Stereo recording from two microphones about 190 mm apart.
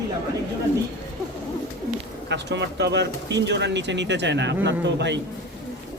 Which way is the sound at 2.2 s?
65° right (ahead or behind).